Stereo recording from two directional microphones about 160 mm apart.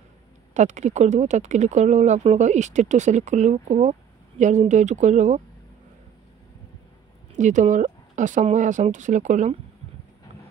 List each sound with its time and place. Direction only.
0.6 s speech: 45° right (ahead or behind)
7.3 s speech: 50° right (ahead or behind)